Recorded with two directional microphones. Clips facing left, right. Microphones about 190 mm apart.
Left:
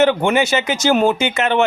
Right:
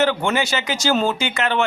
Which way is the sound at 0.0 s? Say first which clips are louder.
Left 5 dB; 20° left (ahead or behind).